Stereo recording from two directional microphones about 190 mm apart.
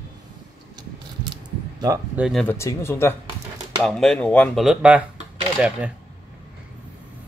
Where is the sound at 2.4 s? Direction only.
15° left (ahead or behind); by 5.9 s 5° right (ahead or behind).